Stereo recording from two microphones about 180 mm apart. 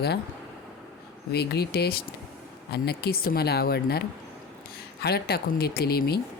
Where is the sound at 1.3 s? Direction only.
65° left (ahead or behind).